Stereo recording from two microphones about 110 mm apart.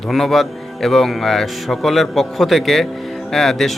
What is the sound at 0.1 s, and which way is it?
A man's voice, centre (ahead or behind).